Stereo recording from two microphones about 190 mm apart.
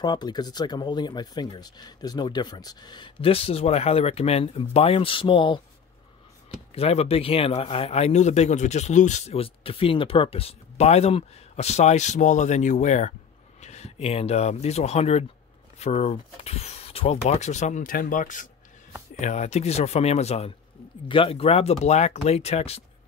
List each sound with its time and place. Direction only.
0.0 s speech: 20° left (ahead or behind)
6.7 s a man's voice: 30° left (ahead or behind)